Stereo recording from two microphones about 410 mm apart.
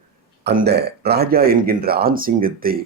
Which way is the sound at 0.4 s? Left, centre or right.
Right.